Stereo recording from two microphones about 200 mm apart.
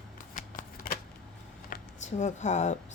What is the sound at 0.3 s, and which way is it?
Shuffling cards, 40° left (ahead or behind).